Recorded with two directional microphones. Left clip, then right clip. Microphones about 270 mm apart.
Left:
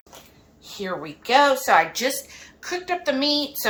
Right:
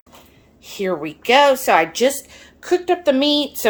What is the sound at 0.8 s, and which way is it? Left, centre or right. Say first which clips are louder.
Speech: right 8 dB; right.